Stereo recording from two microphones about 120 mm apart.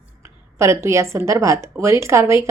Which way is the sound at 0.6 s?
25° right (ahead or behind).